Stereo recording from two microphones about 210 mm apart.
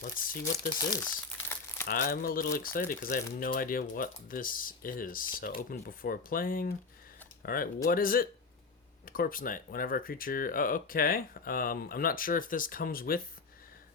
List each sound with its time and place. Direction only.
0.0 s speech: 45° left (ahead or behind)
1.0 s crumpling: 10° left (ahead or behind)
1.9 s speech: 45° left (ahead or behind)